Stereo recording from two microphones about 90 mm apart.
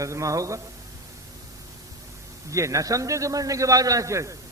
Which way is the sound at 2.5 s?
35° right (ahead or behind).